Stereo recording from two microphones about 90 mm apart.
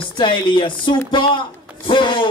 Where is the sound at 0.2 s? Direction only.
65° left (ahead or behind).